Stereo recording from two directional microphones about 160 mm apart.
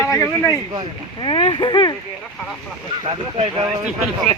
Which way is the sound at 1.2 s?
30° left (ahead or behind).